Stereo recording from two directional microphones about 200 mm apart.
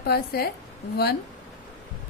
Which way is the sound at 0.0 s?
50° left (ahead or behind).